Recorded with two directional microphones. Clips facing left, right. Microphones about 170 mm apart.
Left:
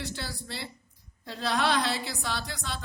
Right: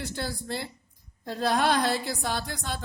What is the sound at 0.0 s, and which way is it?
A woman's voice, 50° right (ahead or behind).